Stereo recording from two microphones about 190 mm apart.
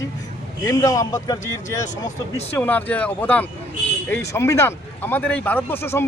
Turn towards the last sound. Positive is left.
turn(degrees=10)  # may be behind; listen again after turning